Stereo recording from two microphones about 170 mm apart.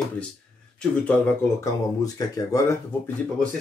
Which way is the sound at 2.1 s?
20° left (ahead or behind).